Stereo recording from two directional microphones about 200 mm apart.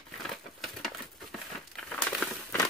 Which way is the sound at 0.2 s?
Centre (ahead or behind).